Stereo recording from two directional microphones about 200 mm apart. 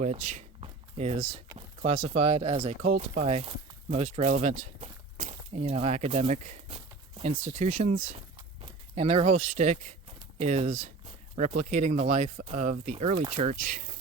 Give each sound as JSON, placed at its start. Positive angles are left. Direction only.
{"t": 0.0, "sound": "speech", "side_deg": -35}